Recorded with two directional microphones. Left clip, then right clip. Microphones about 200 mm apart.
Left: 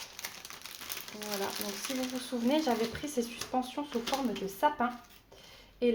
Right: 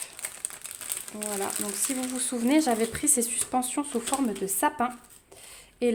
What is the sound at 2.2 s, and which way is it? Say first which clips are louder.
A woman's voice: right 7 dB; 65° right (ahead or behind).